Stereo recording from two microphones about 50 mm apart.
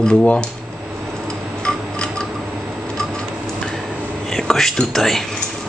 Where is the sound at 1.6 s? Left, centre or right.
Centre.